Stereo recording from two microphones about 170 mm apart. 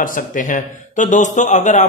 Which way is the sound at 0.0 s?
50° left (ahead or behind).